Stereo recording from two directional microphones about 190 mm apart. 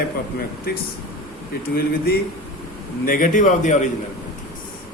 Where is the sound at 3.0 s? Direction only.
45° left (ahead or behind).